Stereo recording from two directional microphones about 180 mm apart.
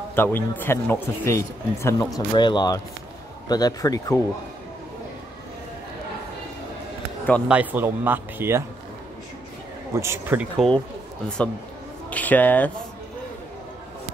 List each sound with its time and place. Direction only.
0.1 s speech: 10° left (ahead or behind)
7.4 s speech: 10° right (ahead or behind)
9.9 s speech: 15° right (ahead or behind)
10.6 s a man's voice: centre (ahead or behind)